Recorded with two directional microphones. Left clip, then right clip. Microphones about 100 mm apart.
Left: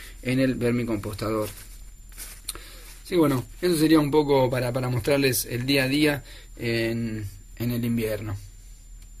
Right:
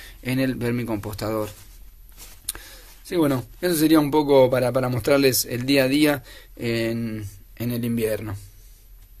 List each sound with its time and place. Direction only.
0.0 s speech: 45° right (ahead or behind)
2.4 s a sound: 45° right (ahead or behind)
3.1 s speech: 30° right (ahead or behind)
3.6 s a man's voice: 45° right (ahead or behind)